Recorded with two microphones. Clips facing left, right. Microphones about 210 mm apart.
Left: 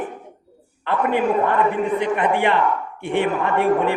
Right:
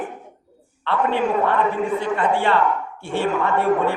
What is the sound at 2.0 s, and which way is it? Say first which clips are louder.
A man's voice: left 2 dB; 20° left (ahead or behind).